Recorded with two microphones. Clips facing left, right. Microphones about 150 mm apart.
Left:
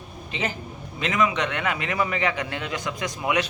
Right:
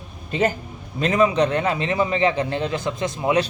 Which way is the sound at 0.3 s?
45° right (ahead or behind).